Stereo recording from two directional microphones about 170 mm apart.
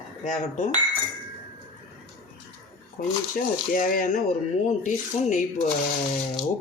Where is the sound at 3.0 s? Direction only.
55° left (ahead or behind).